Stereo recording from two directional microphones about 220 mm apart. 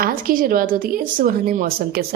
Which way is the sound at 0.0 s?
40° right (ahead or behind).